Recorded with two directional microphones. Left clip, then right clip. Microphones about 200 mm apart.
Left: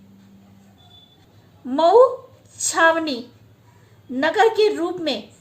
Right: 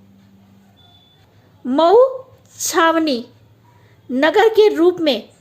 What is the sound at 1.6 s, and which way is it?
A woman's voice, 45° right (ahead or behind).